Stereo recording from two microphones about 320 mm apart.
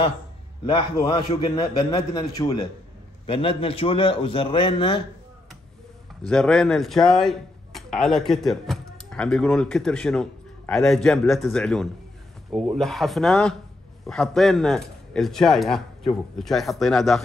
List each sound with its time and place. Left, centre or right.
0.7 s a man's voice: centre
6.2 s a man's voice: centre